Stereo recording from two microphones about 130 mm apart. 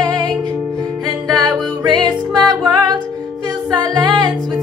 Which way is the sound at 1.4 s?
30° right (ahead or behind).